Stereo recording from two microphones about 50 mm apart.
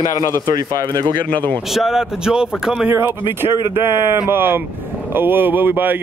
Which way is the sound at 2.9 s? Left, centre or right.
Right.